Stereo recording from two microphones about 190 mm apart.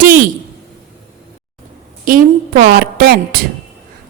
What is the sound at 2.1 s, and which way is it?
A woman's voice, 50° right (ahead or behind).